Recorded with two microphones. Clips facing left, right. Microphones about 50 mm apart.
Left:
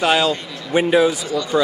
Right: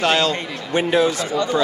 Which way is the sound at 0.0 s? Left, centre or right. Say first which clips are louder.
Left 1 dB; centre.